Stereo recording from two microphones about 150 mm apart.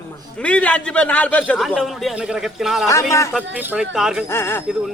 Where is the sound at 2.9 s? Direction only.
20° left (ahead or behind).